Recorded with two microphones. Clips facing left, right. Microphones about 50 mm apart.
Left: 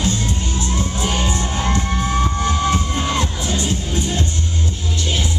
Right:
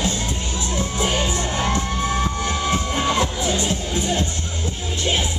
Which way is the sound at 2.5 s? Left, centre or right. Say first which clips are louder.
Left 3 dB; centre.